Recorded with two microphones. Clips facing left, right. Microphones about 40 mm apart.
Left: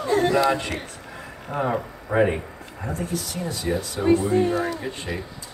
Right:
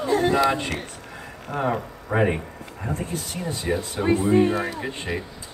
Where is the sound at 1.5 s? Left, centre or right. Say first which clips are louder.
Even; centre.